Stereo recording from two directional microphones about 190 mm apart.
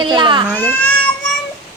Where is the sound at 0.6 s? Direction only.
10° left (ahead or behind).